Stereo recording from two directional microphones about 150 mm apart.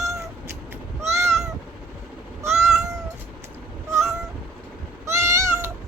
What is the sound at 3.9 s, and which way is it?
Cat, 20° right (ahead or behind).